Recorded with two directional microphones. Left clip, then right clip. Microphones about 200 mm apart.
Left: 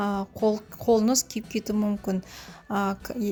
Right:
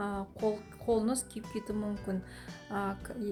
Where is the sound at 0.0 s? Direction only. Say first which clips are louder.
Left 8 dB; 40° left (ahead or behind).